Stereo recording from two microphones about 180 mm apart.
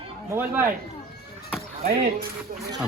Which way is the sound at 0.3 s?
10° right (ahead or behind).